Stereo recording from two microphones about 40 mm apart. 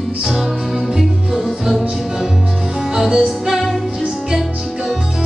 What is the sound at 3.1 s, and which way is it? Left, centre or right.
Music, centre.